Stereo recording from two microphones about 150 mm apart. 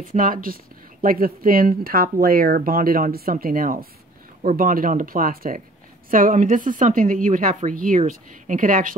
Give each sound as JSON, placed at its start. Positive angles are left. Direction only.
{"t": 0.0, "sound": "a woman's voice", "side_deg": -65}